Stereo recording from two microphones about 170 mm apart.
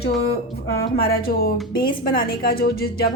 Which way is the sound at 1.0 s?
60° left (ahead or behind).